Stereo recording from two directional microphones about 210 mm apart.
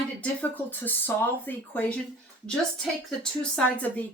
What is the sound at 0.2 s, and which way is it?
Speech, 10° left (ahead or behind).